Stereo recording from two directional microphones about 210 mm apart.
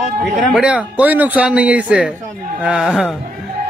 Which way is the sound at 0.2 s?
Centre (ahead or behind).